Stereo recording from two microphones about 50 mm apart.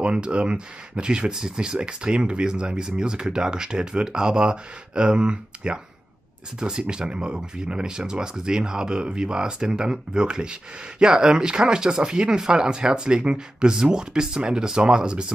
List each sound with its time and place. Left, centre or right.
0.0 s speech: right